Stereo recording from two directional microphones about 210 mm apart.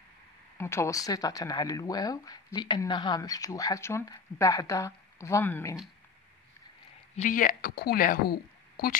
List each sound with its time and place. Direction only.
0.6 s speech: 15° left (ahead or behind)
7.2 s a woman's voice: 40° left (ahead or behind)